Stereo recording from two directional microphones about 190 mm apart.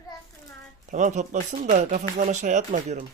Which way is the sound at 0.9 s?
40° right (ahead or behind).